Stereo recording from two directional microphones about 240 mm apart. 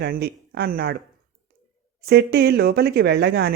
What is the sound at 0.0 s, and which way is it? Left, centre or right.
Speech, right.